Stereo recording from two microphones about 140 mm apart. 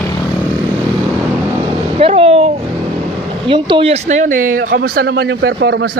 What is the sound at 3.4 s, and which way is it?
Speech, 35° right (ahead or behind).